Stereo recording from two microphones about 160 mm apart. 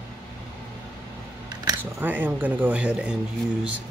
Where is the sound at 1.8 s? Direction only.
10° right (ahead or behind).